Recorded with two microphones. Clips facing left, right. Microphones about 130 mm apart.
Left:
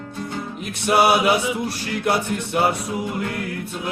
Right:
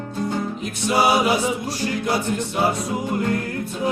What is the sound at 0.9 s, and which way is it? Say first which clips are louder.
A capella: left 2 dB; 60° left (ahead or behind).